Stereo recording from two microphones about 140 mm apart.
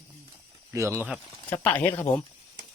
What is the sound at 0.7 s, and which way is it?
Speech, 20° right (ahead or behind).